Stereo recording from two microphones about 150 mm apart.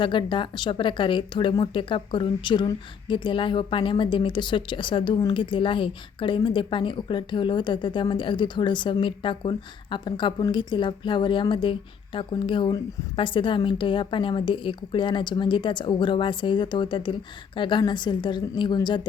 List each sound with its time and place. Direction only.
0.0 s speech: 35° left (ahead or behind)